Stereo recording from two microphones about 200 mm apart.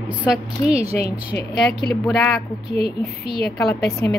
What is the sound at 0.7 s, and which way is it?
Speech, 30° right (ahead or behind).